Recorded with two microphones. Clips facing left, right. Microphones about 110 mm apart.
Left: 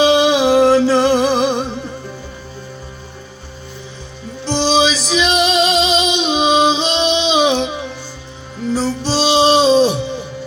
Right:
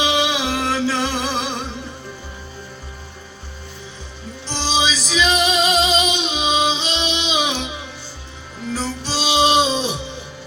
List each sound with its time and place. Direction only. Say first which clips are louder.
0.0 s music: left 8 dB; 35° left (ahead or behind)
4.6 s music: left 6 dB; 65° left (ahead or behind)
5.5 s music: left 3 dB; 25° left (ahead or behind)
8.7 s music: left 7 dB; 30° left (ahead or behind)